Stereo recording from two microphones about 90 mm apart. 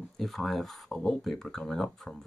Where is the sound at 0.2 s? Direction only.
Centre (ahead or behind).